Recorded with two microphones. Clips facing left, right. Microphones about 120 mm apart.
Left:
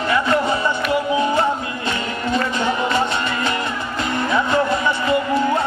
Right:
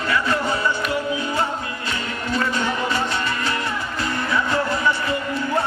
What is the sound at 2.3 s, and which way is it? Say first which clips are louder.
Music: left 2 dB; 25° left (ahead or behind).